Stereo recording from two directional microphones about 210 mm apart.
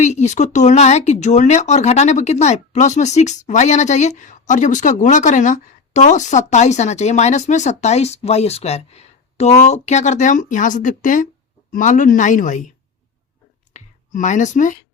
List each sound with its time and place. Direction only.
0.0 s speech: 35° left (ahead or behind)
13.7 s speech: 35° left (ahead or behind)